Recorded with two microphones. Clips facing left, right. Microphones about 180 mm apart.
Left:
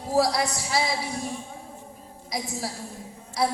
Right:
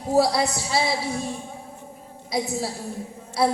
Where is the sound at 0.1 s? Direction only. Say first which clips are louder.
Right 3 dB; 25° right (ahead or behind).